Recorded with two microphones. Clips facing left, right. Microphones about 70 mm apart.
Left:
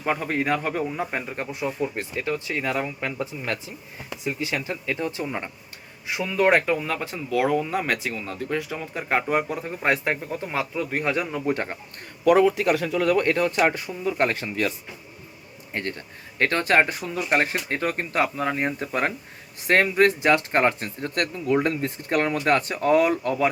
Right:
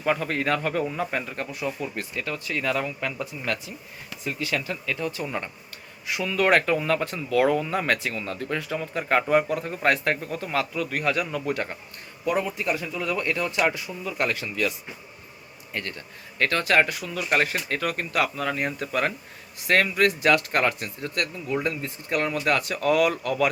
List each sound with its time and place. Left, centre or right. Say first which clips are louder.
0.0 s a man's voice: even; centre
6.7 s speech: right 3 dB; centre; by 11.8 s left
12.2 s speech: left 8 dB; left
15.7 s a man's voice: left 3 dB; left